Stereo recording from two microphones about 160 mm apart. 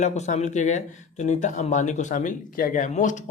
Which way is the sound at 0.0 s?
45° left (ahead or behind).